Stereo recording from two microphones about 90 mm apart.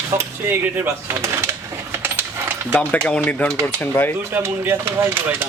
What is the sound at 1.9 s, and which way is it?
Coin, 25° right (ahead or behind).